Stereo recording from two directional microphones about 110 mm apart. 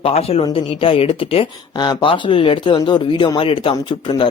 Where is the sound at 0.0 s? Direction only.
65° left (ahead or behind).